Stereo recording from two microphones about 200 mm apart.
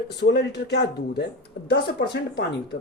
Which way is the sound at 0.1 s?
60° left (ahead or behind).